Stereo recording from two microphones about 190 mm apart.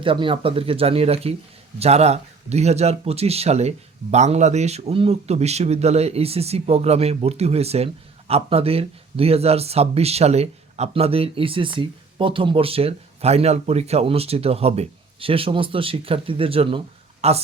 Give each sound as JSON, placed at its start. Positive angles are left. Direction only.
{"t": 0.0, "sound": "speech", "side_deg": -25}